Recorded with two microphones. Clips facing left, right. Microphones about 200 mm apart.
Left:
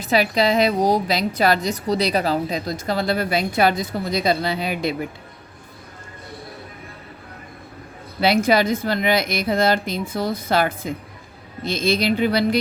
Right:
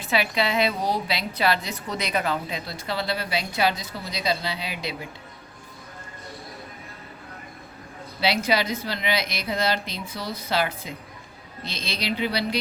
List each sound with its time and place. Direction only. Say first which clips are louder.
0.0 s a woman's voice: left 6 dB; 40° left (ahead or behind)
8.2 s a woman's voice: left 6 dB; 50° left (ahead or behind)